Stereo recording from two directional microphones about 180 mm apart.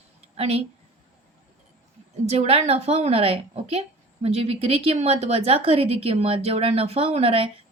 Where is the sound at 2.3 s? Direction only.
35° right (ahead or behind).